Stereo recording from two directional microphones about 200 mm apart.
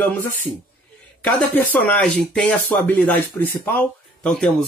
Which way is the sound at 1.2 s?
5° left (ahead or behind).